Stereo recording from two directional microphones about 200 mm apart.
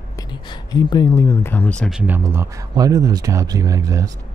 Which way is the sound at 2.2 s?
15° right (ahead or behind).